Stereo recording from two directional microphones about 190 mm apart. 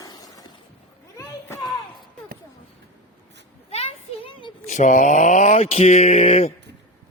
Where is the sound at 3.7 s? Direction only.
30° left (ahead or behind).